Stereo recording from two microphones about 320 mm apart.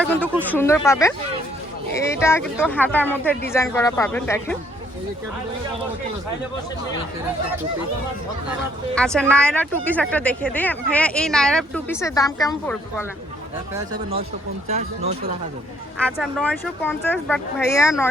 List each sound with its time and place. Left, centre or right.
0.0 s speech: centre
9.0 s speech: centre
14.7 s speech: centre
16.0 s speech: centre